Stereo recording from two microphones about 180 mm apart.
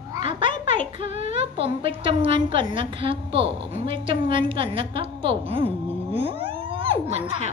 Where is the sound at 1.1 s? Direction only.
35° right (ahead or behind).